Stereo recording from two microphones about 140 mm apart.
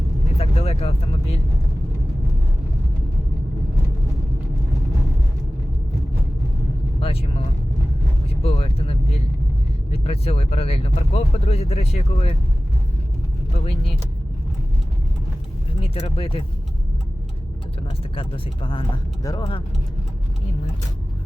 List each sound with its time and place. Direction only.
0.3 s vehicle: 50° left (ahead or behind)
7.0 s vehicle: 45° left (ahead or behind)
8.4 s a sound: 45° left (ahead or behind)
9.9 s speech: 45° left (ahead or behind)
15.8 s speech: 40° left (ahead or behind)
18.1 s speech: 40° left (ahead or behind)